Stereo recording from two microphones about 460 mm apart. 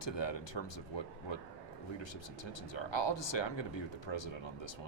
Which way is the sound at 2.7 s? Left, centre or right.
Left.